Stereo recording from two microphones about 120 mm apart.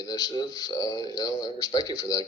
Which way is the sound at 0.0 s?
30° left (ahead or behind).